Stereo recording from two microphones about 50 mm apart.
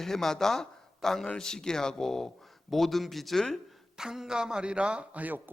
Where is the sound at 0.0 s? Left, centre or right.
Centre.